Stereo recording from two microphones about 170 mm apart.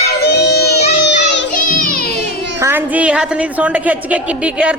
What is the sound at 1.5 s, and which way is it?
Music, 50° left (ahead or behind).